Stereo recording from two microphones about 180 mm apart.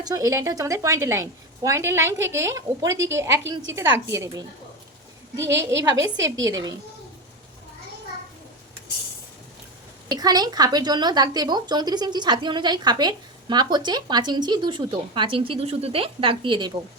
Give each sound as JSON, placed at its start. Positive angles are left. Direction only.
{"t": 0.0, "sound": "a woman's voice", "side_deg": -20}
{"t": 5.5, "sound": "a woman's voice", "side_deg": -15}
{"t": 10.1, "sound": "a woman's voice", "side_deg": -20}